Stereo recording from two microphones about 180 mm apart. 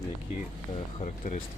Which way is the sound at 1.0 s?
45° left (ahead or behind).